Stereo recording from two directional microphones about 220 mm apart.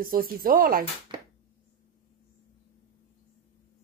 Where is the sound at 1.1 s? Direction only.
20° right (ahead or behind).